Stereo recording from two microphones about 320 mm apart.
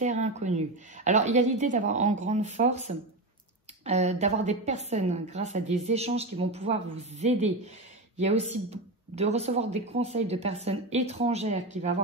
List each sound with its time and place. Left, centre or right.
0.0 s speech: right